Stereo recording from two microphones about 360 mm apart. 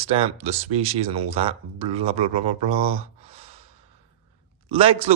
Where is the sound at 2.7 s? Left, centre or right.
Centre.